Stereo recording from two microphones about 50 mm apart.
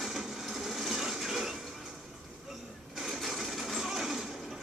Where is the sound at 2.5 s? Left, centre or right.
Centre.